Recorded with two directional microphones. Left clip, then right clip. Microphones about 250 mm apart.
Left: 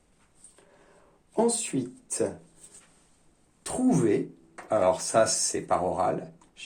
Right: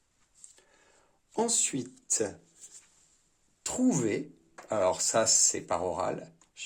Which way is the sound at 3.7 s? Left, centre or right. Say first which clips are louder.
Left 4 dB; right.